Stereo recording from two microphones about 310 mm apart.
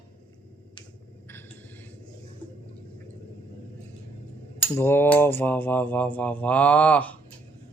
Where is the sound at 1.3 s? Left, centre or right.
Centre.